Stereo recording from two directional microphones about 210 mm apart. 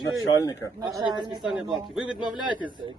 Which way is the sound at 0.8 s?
20° right (ahead or behind).